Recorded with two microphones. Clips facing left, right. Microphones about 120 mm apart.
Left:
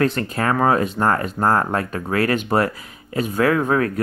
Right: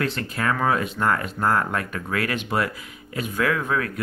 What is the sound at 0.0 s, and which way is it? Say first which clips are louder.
Speech: left 5 dB; 40° left (ahead or behind).